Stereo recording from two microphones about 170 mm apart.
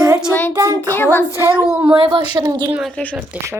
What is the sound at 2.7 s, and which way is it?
Speech, 5° right (ahead or behind).